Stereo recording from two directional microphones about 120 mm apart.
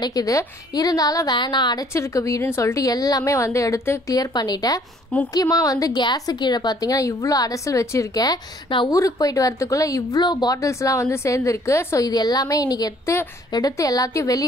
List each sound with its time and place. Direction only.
0.0 s a woman's voice: 30° left (ahead or behind)